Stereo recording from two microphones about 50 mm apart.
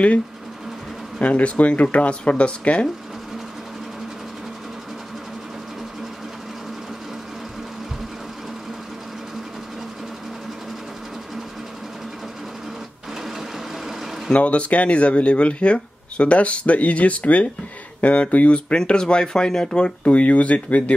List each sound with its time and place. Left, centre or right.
1.2 s speech: left
14.3 s speech: left